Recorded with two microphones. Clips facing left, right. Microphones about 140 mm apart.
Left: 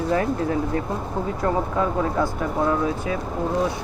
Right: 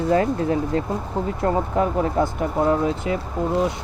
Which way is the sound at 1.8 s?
20° right (ahead or behind).